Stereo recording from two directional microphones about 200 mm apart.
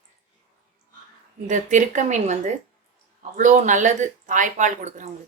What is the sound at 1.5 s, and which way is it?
Speech, 40° right (ahead or behind).